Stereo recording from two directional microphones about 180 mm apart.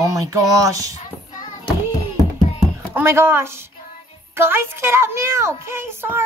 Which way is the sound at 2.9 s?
10° right (ahead or behind).